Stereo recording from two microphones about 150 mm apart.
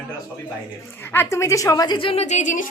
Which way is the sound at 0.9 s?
15° left (ahead or behind).